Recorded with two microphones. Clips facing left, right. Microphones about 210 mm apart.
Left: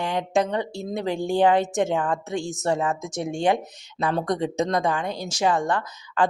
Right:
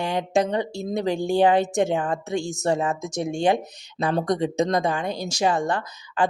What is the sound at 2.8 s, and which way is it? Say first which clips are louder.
Speech: right 1 dB; 40° right (ahead or behind).